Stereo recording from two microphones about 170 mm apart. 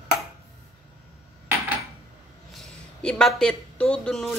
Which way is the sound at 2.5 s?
5° left (ahead or behind).